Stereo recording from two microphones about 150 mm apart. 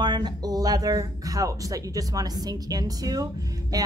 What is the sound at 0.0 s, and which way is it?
A woman's voice, 30° right (ahead or behind).